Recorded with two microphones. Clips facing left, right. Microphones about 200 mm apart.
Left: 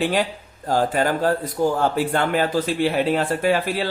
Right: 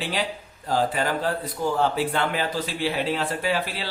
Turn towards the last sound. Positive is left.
turn(degrees=50)  # may be behind; listen again after turning